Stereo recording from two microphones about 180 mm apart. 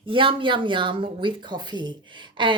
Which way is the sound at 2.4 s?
25° right (ahead or behind).